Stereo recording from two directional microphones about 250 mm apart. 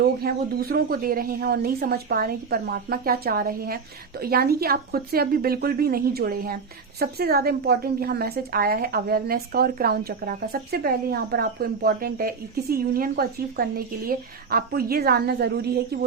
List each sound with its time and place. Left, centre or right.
0.0 s a woman's voice: right